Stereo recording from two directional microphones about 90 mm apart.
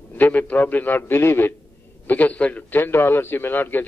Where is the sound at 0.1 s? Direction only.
20° left (ahead or behind).